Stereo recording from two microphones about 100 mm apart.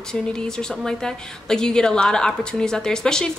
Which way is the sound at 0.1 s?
10° left (ahead or behind).